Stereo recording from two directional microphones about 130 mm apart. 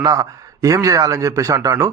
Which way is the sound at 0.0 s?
25° right (ahead or behind).